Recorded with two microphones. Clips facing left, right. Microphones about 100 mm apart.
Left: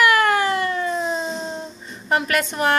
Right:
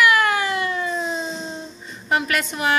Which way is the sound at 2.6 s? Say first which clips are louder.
Left 2 dB; 45° left (ahead or behind).